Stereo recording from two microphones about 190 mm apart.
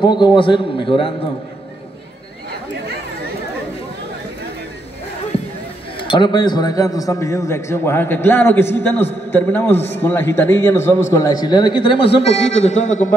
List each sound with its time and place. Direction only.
0.0 s a man's voice: 25° left (ahead or behind)
6.0 s a man's voice: 25° left (ahead or behind)